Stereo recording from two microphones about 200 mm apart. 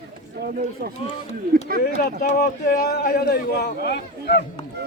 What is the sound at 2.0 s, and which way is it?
A man's voice, 45° left (ahead or behind).